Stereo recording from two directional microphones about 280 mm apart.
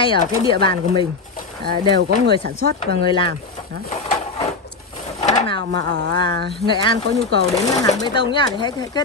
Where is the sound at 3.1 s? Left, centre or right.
Centre.